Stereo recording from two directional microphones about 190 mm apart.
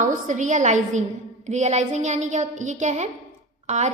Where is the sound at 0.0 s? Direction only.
40° right (ahead or behind).